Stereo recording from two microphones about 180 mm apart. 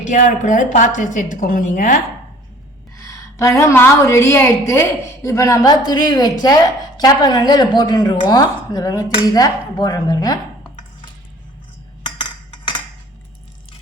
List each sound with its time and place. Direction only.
0.1 s a woman's voice: 45° left (ahead or behind)
3.1 s a woman's voice: 15° left (ahead or behind)
12.0 s a sound: 25° left (ahead or behind)